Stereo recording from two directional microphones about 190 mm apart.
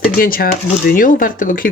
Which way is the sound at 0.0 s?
50° left (ahead or behind).